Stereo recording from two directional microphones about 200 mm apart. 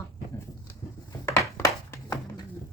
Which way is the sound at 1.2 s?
15° left (ahead or behind).